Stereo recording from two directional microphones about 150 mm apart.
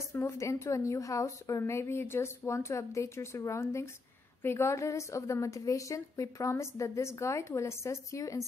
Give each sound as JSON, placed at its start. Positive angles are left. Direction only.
{"t": 0.1, "sound": "a woman's voice", "side_deg": 20}